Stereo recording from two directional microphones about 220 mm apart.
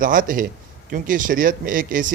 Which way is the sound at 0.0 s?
40° right (ahead or behind).